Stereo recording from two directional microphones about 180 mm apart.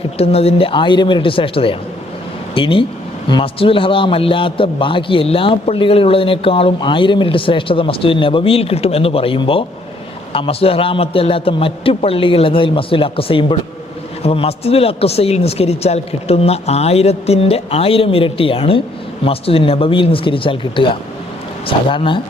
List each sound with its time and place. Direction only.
0.2 s a man's voice: 35° left (ahead or behind)